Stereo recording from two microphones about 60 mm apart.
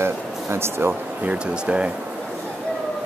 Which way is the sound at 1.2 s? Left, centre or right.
Centre.